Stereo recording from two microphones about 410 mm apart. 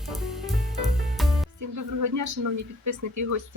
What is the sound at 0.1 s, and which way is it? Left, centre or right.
Music, centre.